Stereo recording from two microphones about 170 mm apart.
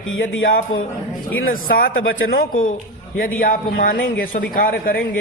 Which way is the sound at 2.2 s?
60° left (ahead or behind).